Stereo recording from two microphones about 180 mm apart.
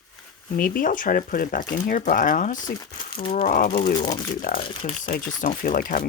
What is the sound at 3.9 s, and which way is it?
Speech, 20° left (ahead or behind).